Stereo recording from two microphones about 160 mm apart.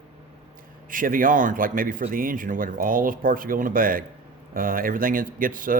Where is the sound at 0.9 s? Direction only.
60° right (ahead or behind).